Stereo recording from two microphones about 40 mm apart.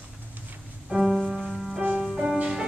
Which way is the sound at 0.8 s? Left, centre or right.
Centre.